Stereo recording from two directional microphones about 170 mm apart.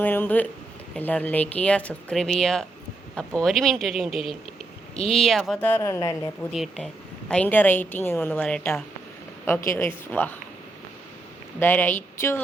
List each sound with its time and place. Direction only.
0.0 s a woman's voice: 10° left (ahead or behind)
5.2 s speech: centre (ahead or behind)
5.5 s a woman's voice: 15° left (ahead or behind)
6.5 s a woman's voice: centre (ahead or behind)
11.6 s a woman's voice: 10° left (ahead or behind)